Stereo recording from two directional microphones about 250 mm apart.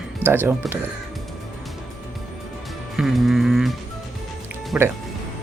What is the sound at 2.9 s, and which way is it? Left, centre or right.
Music, centre.